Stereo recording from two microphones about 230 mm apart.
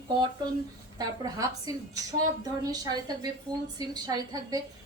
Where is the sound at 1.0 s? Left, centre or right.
Centre.